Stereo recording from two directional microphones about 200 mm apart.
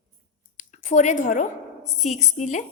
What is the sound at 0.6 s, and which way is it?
A woman's voice, 40° left (ahead or behind).